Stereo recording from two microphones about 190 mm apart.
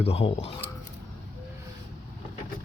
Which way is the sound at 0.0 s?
30° left (ahead or behind).